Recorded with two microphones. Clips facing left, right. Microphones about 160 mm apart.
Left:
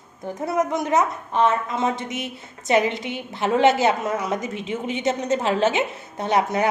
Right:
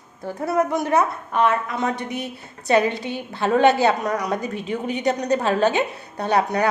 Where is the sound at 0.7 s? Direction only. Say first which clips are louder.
Right 1 dB; 20° left (ahead or behind).